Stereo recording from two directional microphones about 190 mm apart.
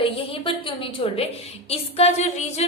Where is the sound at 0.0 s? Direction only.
30° left (ahead or behind).